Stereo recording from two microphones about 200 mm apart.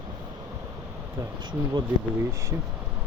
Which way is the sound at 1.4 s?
20° right (ahead or behind).